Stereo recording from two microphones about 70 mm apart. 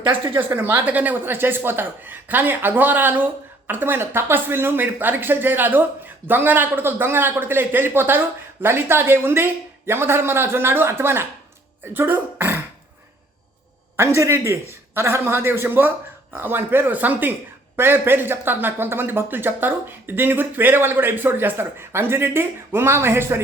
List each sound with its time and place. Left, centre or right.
0.1 s speech: right
13.9 s speech: right